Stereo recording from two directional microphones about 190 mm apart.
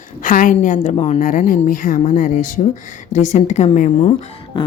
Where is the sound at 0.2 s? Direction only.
45° left (ahead or behind).